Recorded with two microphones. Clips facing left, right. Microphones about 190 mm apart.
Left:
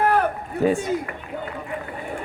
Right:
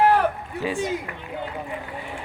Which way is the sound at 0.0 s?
50° left (ahead or behind).